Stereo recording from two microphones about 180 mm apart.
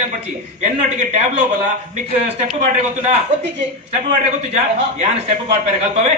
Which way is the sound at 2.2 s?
40° right (ahead or behind).